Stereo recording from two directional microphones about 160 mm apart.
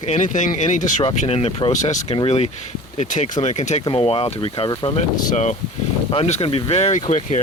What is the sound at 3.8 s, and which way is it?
Speech, 35° left (ahead or behind).